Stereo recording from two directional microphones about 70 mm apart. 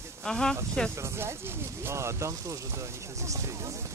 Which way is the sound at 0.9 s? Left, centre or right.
Right.